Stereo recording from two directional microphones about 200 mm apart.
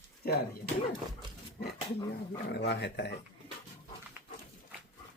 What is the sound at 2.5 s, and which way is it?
Speech, 55° left (ahead or behind).